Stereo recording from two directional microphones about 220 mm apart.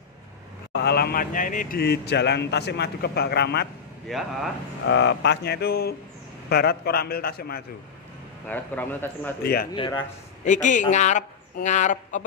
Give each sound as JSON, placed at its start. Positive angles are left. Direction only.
{"t": 0.8, "sound": "a man's voice", "side_deg": 45}
{"t": 4.1, "sound": "speech", "side_deg": 0}
{"t": 4.8, "sound": "a man's voice", "side_deg": 55}
{"t": 8.5, "sound": "speech", "side_deg": 10}
{"t": 9.4, "sound": "a man's voice", "side_deg": 45}
{"t": 10.4, "sound": "speech", "side_deg": 35}